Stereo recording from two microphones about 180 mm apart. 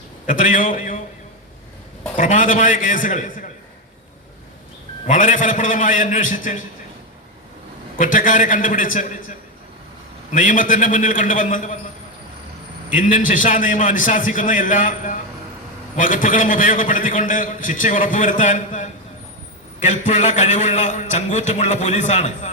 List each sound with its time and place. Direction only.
0.3 s a man's voice: 45° left (ahead or behind)
2.1 s a man's voice: 45° left (ahead or behind)
5.0 s a man's voice: 45° left (ahead or behind)
7.9 s a man's voice: 45° left (ahead or behind)
10.3 s a man's voice: 45° left (ahead or behind)
12.9 s a man's voice: 45° left (ahead or behind)